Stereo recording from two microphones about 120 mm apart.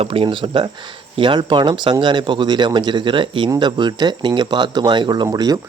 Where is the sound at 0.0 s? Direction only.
50° right (ahead or behind).